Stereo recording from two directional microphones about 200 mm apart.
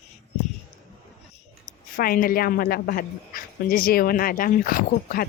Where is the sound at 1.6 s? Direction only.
45° left (ahead or behind).